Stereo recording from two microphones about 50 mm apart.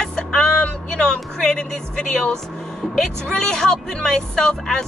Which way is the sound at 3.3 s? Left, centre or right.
Centre.